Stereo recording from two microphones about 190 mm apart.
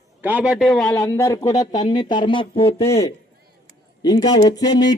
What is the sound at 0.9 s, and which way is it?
Speech, 15° left (ahead or behind).